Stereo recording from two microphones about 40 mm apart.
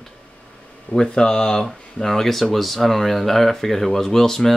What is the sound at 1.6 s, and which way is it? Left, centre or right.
Speech, centre.